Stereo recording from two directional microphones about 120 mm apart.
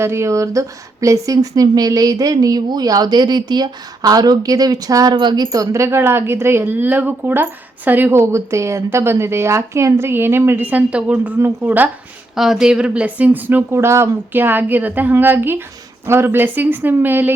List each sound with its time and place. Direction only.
0.0 s a woman's voice: 20° right (ahead or behind)
12.4 s speech: 5° right (ahead or behind)